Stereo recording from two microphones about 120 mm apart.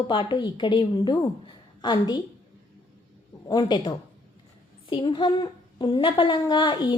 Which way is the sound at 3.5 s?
35° left (ahead or behind).